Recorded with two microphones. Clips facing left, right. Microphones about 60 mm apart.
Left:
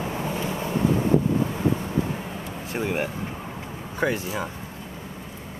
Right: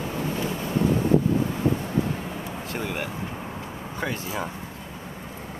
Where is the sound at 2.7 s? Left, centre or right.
Left.